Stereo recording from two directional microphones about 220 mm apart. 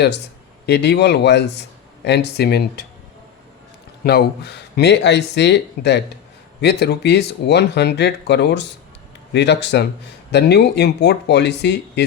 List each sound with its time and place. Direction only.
0.6 s speech: 50° left (ahead or behind)
4.0 s speech: 45° left (ahead or behind)